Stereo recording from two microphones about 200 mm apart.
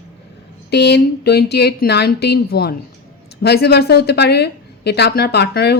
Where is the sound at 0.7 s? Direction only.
55° left (ahead or behind).